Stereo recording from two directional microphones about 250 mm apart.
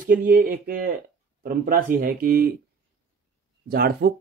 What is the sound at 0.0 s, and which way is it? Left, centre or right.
Speech, right.